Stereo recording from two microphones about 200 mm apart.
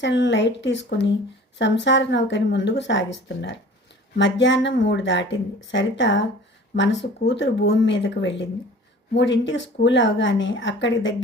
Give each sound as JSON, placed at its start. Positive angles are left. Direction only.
{"t": 0.0, "sound": "speech", "side_deg": 65}